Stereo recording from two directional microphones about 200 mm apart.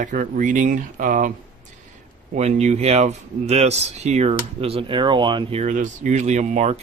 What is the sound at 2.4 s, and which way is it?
Speech, 35° right (ahead or behind).